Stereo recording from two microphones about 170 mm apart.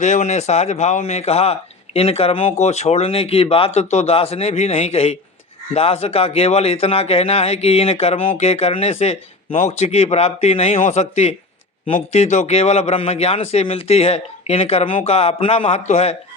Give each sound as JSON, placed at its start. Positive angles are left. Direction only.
{"t": 0.0, "sound": "a man's voice", "side_deg": 45}